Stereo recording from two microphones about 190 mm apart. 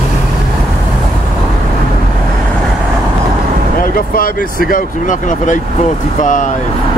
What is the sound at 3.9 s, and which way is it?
Speech, 50° left (ahead or behind).